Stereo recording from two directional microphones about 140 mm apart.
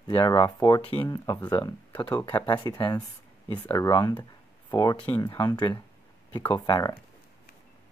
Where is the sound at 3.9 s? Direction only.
30° left (ahead or behind).